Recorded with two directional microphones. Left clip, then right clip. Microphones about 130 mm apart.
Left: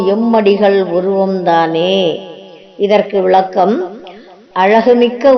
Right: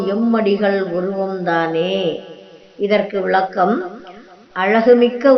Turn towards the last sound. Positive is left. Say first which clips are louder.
# left 2 dB
turn(degrees=20)  # may be behind; listen again after turning